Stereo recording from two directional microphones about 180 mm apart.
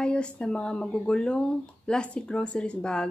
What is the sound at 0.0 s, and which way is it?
Speech, 5° left (ahead or behind).